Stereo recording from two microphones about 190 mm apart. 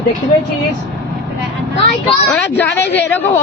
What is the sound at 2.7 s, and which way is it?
Speech, 65° left (ahead or behind).